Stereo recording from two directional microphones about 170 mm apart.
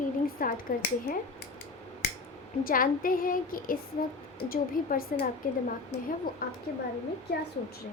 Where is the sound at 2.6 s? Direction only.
55° left (ahead or behind).